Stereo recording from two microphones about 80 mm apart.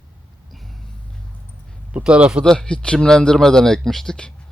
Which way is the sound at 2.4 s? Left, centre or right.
Centre.